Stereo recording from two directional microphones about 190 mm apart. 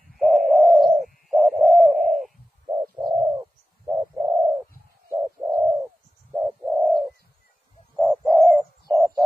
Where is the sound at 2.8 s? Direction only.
20° right (ahead or behind).